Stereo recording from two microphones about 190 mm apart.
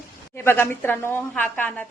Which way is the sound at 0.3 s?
10° left (ahead or behind).